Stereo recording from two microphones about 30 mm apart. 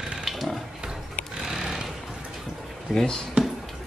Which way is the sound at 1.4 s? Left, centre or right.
Centre.